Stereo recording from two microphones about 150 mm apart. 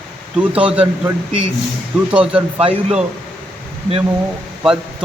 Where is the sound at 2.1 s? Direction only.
5° right (ahead or behind).